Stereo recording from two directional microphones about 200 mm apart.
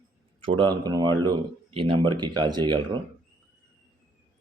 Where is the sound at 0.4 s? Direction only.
25° right (ahead or behind).